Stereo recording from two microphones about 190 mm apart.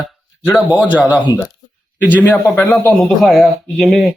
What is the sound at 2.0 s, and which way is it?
Speech, 10° left (ahead or behind).